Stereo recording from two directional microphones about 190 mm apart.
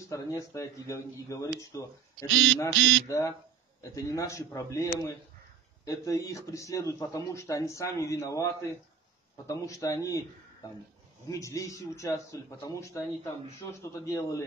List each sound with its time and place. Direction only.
0.1 s speech: 15° left (ahead or behind)
11.2 s speech: 15° left (ahead or behind)